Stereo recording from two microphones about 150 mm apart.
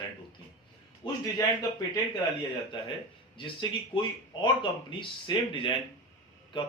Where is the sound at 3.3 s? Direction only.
35° left (ahead or behind).